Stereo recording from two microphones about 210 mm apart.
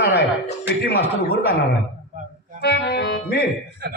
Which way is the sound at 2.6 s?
50° left (ahead or behind).